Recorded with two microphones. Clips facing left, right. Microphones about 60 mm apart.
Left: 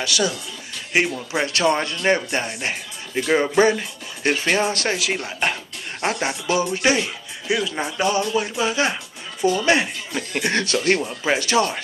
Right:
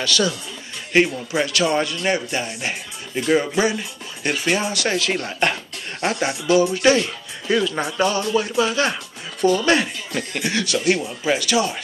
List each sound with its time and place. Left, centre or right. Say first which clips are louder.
0.0 s speech: right 1 dB; left
1.3 s speech: left 2 dB; left
4.9 s speech: right 2 dB; centre
6.0 s speech: right 2 dB; left
10.4 s speech: even; left
11.1 s speech: even; left